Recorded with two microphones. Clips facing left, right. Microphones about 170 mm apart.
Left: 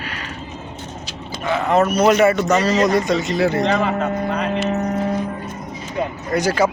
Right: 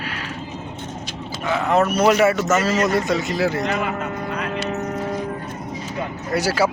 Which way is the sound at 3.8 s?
30° left (ahead or behind).